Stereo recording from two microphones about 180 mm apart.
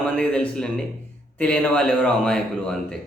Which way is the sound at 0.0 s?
5° left (ahead or behind).